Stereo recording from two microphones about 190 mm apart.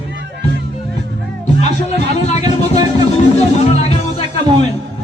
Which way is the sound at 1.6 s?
35° left (ahead or behind).